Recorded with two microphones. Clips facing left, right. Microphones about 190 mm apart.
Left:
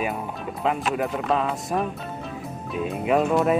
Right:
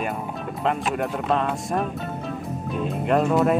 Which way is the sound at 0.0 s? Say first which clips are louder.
Even; centre (ahead or behind).